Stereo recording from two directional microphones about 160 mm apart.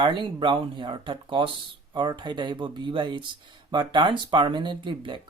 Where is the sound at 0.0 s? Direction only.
30° right (ahead or behind).